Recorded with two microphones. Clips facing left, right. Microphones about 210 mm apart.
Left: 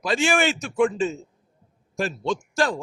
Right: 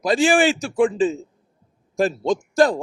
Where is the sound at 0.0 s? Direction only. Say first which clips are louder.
Right 5 dB; 35° right (ahead or behind).